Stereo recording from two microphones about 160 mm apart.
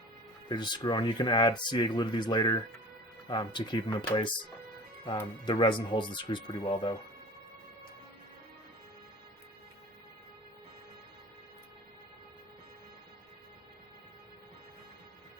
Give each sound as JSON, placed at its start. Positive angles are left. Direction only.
{"t": 0.4, "sound": "speech", "side_deg": 30}
{"t": 5.5, "sound": "speech", "side_deg": 30}